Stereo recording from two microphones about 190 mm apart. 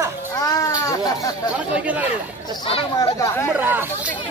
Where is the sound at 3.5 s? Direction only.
10° right (ahead or behind).